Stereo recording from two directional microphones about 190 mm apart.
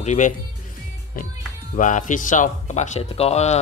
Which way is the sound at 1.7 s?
40° left (ahead or behind).